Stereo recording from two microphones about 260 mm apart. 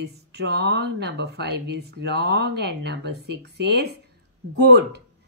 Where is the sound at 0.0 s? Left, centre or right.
Right.